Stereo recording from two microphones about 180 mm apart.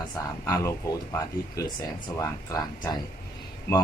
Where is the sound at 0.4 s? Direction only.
15° left (ahead or behind).